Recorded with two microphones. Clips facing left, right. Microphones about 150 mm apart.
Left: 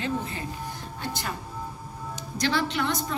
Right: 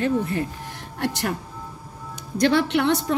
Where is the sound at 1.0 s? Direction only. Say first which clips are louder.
Right 8 dB; 75° right (ahead or behind).